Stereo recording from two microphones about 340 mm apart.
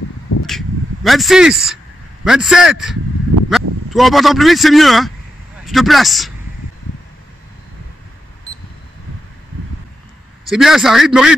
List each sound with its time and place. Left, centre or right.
0.5 s a sound: centre
2.2 s a man's voice: centre
10.5 s a man's voice: centre